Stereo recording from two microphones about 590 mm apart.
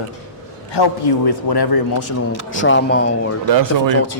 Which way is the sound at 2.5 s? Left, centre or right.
Centre.